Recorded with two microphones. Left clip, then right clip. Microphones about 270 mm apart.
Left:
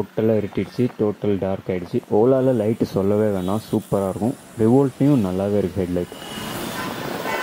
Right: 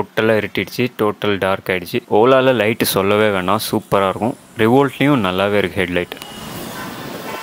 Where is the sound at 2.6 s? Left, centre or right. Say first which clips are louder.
Right 5 dB; right.